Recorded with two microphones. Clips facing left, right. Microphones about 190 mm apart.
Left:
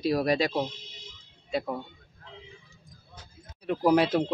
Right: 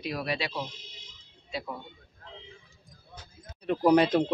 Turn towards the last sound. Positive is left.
turn(degrees=5)  # may be behind; listen again after turning